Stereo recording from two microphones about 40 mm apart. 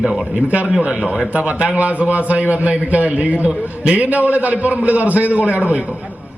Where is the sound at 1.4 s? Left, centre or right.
Right.